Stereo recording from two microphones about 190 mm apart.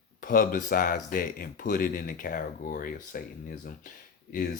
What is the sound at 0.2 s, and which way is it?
Speech, 45° left (ahead or behind).